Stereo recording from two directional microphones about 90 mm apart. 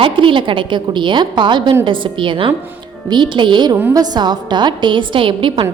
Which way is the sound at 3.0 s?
55° right (ahead or behind).